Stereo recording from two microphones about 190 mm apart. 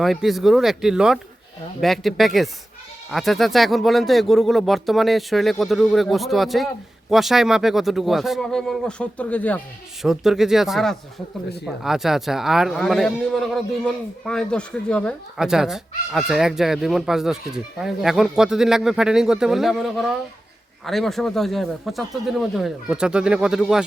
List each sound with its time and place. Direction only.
0.0 s speech: centre (ahead or behind)